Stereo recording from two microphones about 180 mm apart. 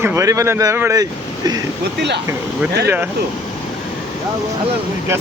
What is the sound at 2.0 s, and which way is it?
Speech, 70° right (ahead or behind).